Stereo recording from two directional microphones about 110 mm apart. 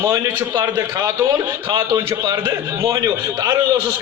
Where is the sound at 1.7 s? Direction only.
40° right (ahead or behind).